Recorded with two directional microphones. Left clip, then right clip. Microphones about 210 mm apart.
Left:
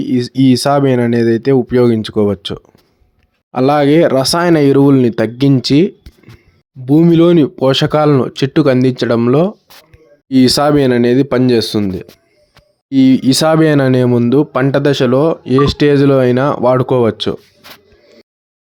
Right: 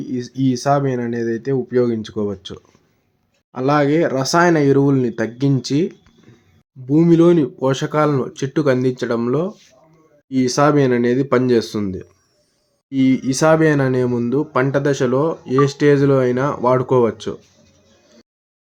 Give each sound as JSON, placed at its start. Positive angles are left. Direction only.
{"t": 0.0, "sound": "speech", "side_deg": 35}